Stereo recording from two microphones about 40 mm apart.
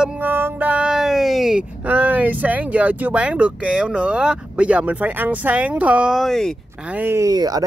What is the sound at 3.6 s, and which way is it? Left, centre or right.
Speech, right.